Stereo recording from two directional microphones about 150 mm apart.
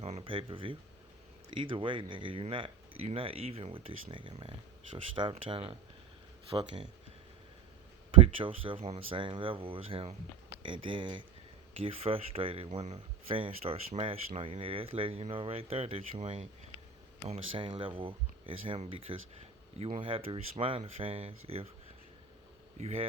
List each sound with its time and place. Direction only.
0.2 s speech: 35° right (ahead or behind)
8.2 s speech: 35° right (ahead or behind)
22.8 s a man's voice: 45° right (ahead or behind)